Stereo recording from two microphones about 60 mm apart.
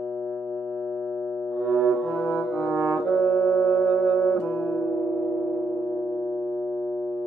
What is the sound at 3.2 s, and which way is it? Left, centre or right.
Music, left.